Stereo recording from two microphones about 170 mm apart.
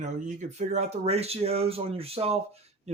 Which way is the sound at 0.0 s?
45° right (ahead or behind).